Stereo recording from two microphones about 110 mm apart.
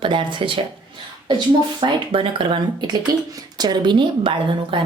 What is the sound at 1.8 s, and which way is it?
A woman's voice, 50° right (ahead or behind).